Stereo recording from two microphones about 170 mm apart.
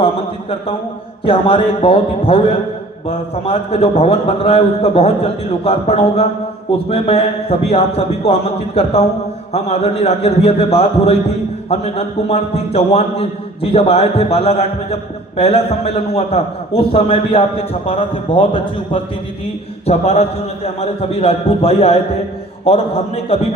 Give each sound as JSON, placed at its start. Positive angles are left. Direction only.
{"t": 1.2, "sound": "a man's voice", "side_deg": 30}